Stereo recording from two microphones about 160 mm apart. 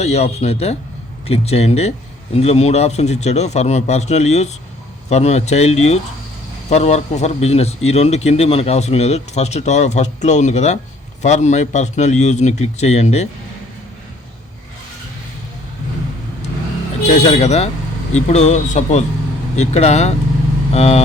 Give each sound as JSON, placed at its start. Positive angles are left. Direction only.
{"t": 0.0, "sound": "speech", "side_deg": 40}
{"t": 17.0, "sound": "speech", "side_deg": 40}